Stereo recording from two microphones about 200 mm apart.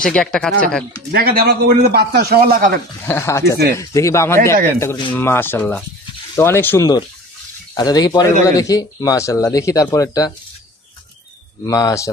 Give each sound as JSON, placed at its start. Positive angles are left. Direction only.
{"t": 0.0, "sound": "speech", "side_deg": 5}
{"t": 1.1, "sound": "a man's voice", "side_deg": -50}
{"t": 3.1, "sound": "speech", "side_deg": 10}
{"t": 11.6, "sound": "speech", "side_deg": 15}